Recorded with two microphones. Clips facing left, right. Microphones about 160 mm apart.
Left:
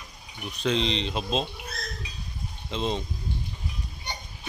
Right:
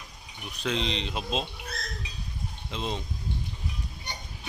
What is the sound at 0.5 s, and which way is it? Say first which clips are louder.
Speech: left 4 dB; 5° right (ahead or behind).